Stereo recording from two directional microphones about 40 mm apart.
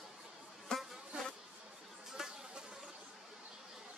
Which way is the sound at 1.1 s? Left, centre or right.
Right.